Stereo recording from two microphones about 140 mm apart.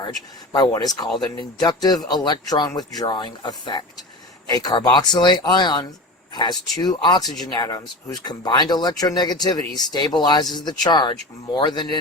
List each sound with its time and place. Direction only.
0.5 s speech: 30° left (ahead or behind)